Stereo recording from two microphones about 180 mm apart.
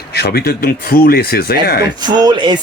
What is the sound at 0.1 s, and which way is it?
Speech, 65° left (ahead or behind).